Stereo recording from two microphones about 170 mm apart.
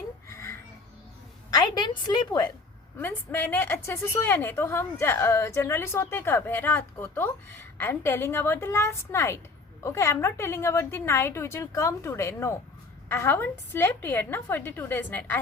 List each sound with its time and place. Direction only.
0.3 s music: 15° left (ahead or behind)
1.5 s a woman's voice: 25° left (ahead or behind)
3.0 s a woman's voice: 15° left (ahead or behind)